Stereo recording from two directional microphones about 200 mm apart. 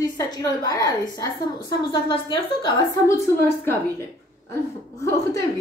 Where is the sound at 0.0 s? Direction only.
20° left (ahead or behind).